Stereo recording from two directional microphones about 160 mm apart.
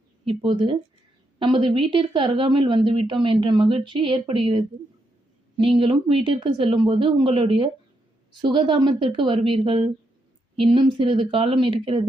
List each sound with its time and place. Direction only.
0.3 s a woman's voice: 30° right (ahead or behind)